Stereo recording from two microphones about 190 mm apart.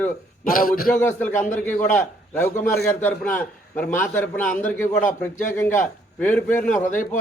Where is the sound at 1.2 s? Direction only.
10° left (ahead or behind).